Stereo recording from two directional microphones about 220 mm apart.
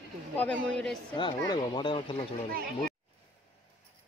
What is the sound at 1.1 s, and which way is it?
Speech, 20° left (ahead or behind).